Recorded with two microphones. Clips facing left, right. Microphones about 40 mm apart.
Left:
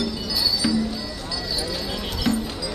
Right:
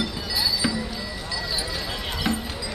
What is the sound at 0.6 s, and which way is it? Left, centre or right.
Music, centre.